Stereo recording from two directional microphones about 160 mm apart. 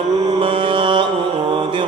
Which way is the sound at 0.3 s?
35° right (ahead or behind).